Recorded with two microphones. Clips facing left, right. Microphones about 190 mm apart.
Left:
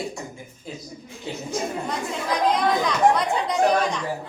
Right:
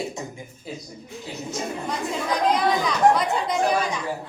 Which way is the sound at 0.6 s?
5° right (ahead or behind).